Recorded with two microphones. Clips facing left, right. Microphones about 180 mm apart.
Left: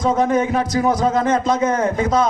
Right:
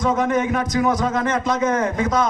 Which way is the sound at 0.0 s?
30° left (ahead or behind).